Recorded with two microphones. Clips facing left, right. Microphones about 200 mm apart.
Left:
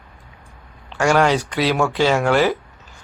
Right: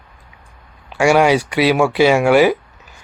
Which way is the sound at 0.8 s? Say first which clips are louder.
Right 4 dB; 10° right (ahead or behind).